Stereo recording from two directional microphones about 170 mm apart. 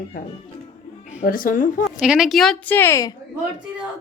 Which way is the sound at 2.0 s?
5° right (ahead or behind).